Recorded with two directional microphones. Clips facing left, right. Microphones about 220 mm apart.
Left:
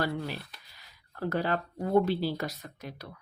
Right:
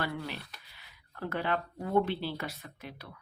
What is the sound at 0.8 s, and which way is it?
Speech, 40° left (ahead or behind).